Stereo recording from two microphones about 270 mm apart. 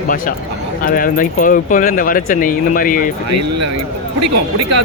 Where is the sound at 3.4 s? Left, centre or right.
Right.